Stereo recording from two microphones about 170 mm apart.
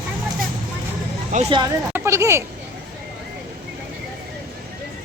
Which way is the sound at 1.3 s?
45° right (ahead or behind).